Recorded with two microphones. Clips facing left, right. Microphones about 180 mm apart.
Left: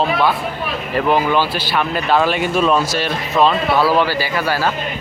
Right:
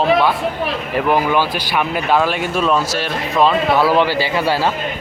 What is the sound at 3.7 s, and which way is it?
A man's voice, 20° right (ahead or behind).